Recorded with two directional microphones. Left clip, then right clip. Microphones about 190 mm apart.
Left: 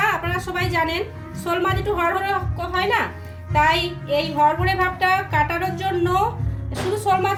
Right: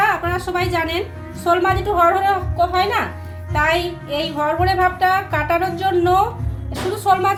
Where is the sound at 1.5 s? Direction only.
20° right (ahead or behind).